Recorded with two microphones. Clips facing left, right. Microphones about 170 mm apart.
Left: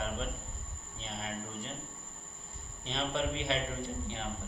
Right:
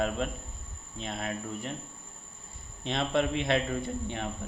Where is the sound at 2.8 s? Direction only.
60° right (ahead or behind).